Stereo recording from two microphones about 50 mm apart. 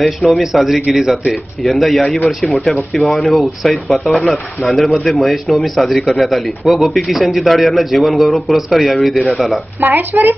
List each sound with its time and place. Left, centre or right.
0.0 s speech: centre
9.8 s speech: right